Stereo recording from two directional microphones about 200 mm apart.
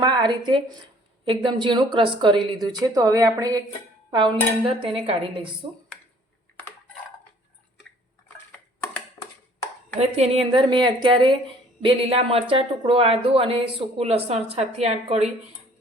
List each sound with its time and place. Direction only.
0.0 s speech: 20° right (ahead or behind)
10.0 s speech: 25° right (ahead or behind)